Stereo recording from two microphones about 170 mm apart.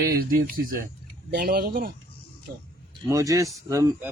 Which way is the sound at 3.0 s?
20° right (ahead or behind).